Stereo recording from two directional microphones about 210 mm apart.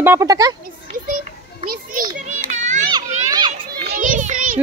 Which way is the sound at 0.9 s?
40° right (ahead or behind).